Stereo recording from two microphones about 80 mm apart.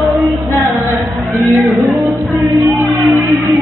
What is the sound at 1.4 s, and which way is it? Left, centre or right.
Music, right.